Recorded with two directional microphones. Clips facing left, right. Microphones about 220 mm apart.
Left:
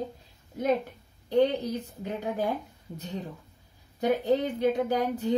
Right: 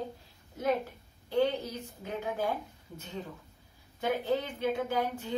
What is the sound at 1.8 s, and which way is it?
Speech, 35° left (ahead or behind).